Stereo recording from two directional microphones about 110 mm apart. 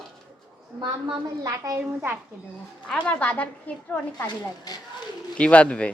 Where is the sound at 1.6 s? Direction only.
30° right (ahead or behind).